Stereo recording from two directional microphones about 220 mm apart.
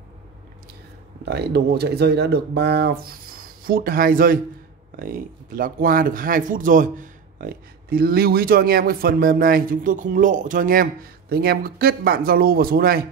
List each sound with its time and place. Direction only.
1.2 s speech: 50° right (ahead or behind)